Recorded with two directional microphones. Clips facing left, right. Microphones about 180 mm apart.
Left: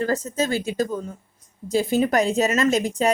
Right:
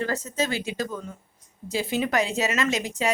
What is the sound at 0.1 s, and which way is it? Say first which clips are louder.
A woman's voice: left 4 dB; 45° left (ahead or behind).